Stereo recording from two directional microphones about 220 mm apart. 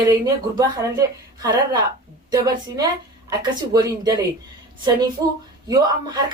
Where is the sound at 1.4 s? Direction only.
15° right (ahead or behind).